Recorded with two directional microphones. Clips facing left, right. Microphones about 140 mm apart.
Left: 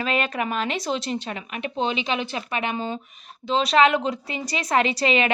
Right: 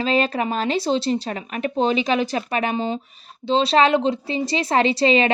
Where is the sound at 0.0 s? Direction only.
30° right (ahead or behind).